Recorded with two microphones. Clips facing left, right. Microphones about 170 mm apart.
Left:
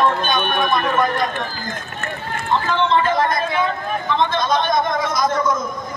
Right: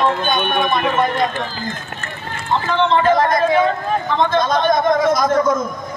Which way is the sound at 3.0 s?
40° right (ahead or behind).